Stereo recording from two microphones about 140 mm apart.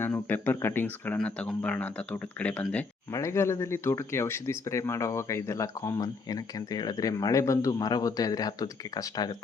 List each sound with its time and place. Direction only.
0.0 s speech: 15° left (ahead or behind)
3.1 s speech: 20° left (ahead or behind)